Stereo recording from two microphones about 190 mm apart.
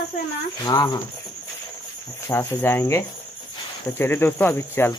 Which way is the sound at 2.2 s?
10° left (ahead or behind).